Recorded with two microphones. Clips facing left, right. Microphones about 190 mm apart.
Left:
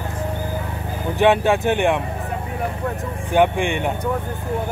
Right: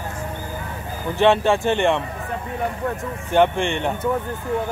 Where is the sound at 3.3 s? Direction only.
10° left (ahead or behind).